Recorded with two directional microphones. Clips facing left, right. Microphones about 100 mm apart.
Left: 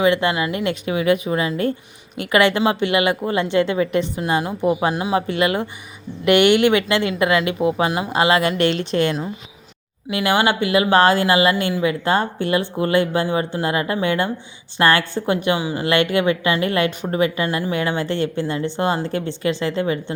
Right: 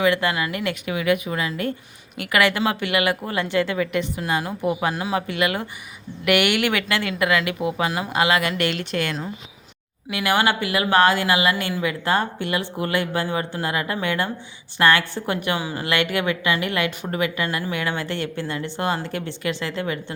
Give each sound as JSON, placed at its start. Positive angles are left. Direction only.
{"t": 0.0, "sound": "a woman's voice", "side_deg": 25}
{"t": 15.9, "sound": "a woman's voice", "side_deg": 25}
{"t": 17.4, "sound": "a woman's voice", "side_deg": 20}